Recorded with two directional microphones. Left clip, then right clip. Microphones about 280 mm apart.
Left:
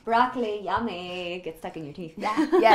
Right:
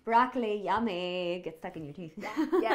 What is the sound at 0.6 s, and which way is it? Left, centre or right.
A woman's voice, right.